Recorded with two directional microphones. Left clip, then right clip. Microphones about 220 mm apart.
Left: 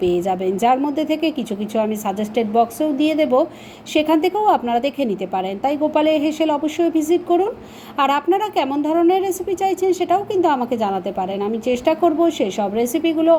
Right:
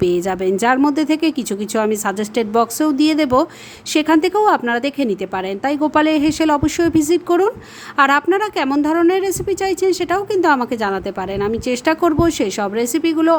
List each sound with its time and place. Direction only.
0.0 s a woman's voice: 25° right (ahead or behind)